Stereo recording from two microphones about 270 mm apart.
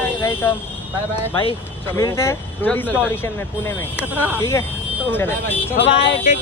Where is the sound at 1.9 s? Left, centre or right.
Centre.